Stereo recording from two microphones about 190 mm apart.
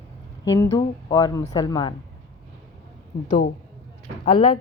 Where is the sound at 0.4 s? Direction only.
20° left (ahead or behind).